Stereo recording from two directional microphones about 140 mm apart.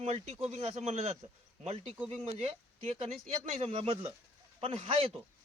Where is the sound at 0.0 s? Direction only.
50° right (ahead or behind).